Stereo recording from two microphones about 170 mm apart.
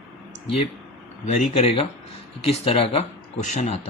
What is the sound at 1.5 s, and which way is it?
A man's voice, 35° left (ahead or behind).